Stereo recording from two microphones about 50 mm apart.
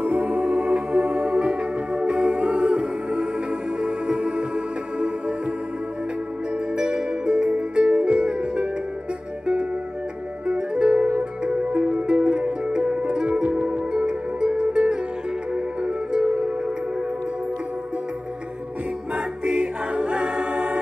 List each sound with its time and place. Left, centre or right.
0.0 s music: right
6.8 s music: right
10.4 s music: centre
19.4 s music: centre